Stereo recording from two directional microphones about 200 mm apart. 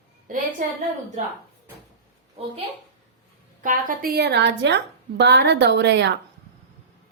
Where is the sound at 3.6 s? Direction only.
40° right (ahead or behind); by 6.1 s 60° right (ahead or behind).